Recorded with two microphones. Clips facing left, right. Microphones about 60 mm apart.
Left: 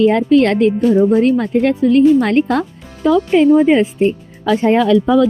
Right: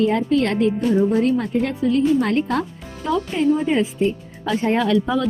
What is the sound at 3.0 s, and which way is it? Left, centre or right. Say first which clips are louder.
Speech: left 9 dB; left.